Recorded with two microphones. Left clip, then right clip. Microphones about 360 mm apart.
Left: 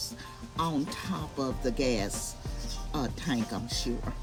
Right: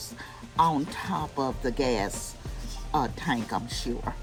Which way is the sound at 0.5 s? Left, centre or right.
Centre.